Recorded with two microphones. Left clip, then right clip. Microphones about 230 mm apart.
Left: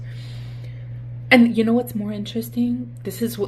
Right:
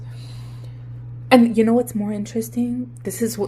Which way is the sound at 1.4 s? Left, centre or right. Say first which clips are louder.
Right 2 dB; right.